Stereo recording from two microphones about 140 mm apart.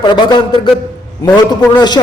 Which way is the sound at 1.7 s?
30° left (ahead or behind).